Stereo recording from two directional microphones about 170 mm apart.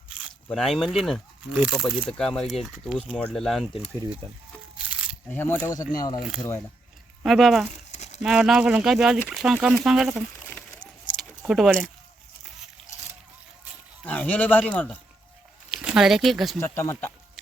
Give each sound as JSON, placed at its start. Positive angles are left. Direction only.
{"t": 0.5, "sound": "speech", "side_deg": 0}
{"t": 3.9, "sound": "speech", "side_deg": -25}
{"t": 5.3, "sound": "a man's voice", "side_deg": 10}
{"t": 7.2, "sound": "speech", "side_deg": 0}
{"t": 7.9, "sound": "a sound", "side_deg": 40}
{"t": 8.2, "sound": "speech", "side_deg": -5}
{"t": 11.2, "sound": "keys jangling", "side_deg": 0}
{"t": 14.0, "sound": "a man's voice", "side_deg": 10}
{"t": 15.7, "sound": "speech", "side_deg": -5}
{"t": 16.6, "sound": "a man's voice", "side_deg": 15}